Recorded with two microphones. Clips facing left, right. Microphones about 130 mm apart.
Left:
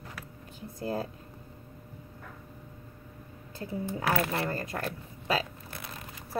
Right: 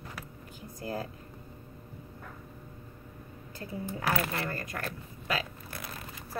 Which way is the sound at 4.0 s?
25° left (ahead or behind).